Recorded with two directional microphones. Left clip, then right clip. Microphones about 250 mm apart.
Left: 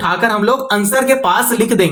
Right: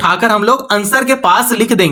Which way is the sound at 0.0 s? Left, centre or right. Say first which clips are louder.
Right 3 dB; right.